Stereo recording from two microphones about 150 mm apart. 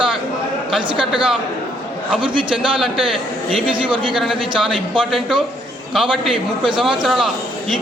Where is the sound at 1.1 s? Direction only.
5° right (ahead or behind).